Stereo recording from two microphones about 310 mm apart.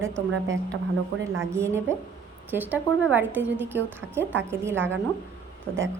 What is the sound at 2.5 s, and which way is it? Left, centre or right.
A woman's voice, centre.